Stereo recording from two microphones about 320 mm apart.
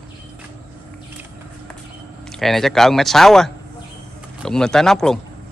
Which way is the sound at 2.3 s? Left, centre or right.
Centre.